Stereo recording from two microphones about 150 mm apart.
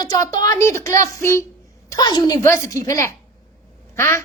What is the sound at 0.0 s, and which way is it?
A woman's voice, 25° left (ahead or behind).